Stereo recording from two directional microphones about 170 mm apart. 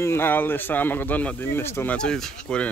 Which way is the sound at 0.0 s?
15° left (ahead or behind).